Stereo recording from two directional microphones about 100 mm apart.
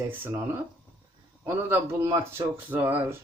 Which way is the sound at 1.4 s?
25° right (ahead or behind).